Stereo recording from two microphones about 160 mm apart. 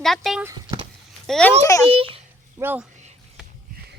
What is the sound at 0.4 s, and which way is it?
Speech, 25° right (ahead or behind).